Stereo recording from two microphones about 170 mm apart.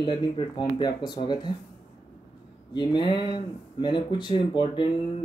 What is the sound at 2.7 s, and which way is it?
Speech, 25° left (ahead or behind).